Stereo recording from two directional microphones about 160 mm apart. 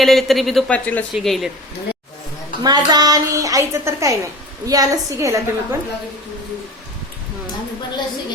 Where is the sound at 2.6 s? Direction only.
25° right (ahead or behind).